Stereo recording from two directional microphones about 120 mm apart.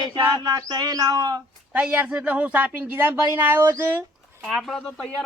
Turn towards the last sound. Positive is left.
turn(degrees=5)  # may be behind; listen again after turning